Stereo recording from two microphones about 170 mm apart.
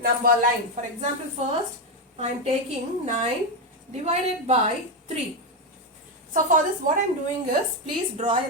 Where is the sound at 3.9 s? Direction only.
40° right (ahead or behind).